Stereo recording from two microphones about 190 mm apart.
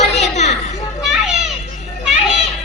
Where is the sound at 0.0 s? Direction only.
35° left (ahead or behind).